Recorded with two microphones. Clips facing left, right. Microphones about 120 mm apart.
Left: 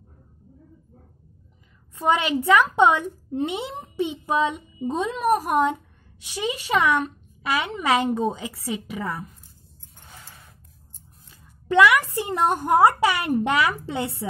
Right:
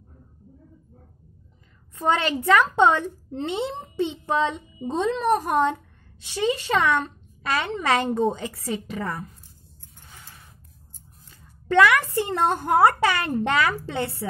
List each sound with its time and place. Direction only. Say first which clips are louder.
2.0 s speech: left 1 dB; 10° left (ahead or behind)
11.6 s speech: left 1 dB; 15° left (ahead or behind)